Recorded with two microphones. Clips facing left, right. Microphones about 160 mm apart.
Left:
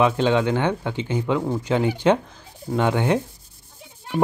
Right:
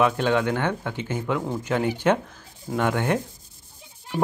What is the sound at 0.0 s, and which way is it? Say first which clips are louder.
Speech: left 2 dB; 15° left (ahead or behind).